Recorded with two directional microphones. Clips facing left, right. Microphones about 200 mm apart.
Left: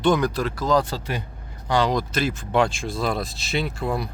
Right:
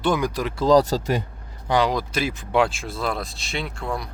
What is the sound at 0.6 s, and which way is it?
Speech, 35° right (ahead or behind).